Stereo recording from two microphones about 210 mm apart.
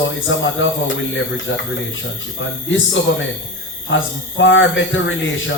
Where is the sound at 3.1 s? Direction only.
65° left (ahead or behind).